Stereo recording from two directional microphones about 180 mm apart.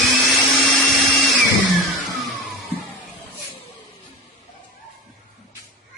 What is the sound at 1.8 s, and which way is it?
Music, centre (ahead or behind).